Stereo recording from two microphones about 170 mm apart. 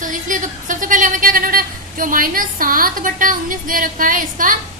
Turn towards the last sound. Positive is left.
turn(degrees=-50)  # may be behind; listen again after turning